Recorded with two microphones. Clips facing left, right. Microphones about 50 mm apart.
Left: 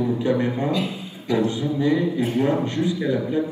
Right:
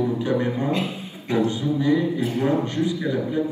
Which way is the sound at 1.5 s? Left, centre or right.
Left.